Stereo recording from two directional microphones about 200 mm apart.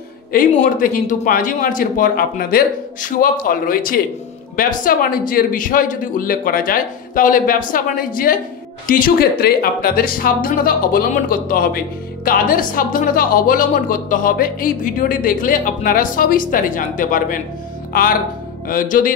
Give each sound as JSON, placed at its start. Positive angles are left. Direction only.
{"t": 0.3, "sound": "a woman's voice", "side_deg": 45}
{"t": 18.7, "sound": "a woman's voice", "side_deg": 40}